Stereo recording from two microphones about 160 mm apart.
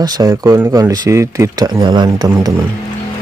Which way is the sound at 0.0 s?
25° right (ahead or behind).